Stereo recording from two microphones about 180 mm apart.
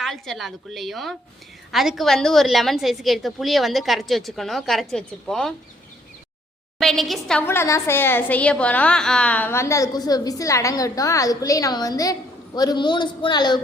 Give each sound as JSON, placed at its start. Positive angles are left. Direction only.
{"t": 0.0, "sound": "a woman's voice", "side_deg": 0}
{"t": 6.7, "sound": "a woman's voice", "side_deg": 0}